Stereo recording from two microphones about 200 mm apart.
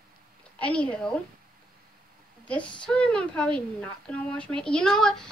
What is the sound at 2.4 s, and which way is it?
A woman's voice, 5° left (ahead or behind).